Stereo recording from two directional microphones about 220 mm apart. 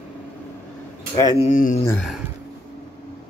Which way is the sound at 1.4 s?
35° left (ahead or behind).